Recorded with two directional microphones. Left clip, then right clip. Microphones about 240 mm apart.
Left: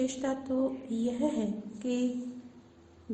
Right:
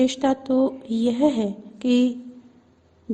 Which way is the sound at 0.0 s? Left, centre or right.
Right.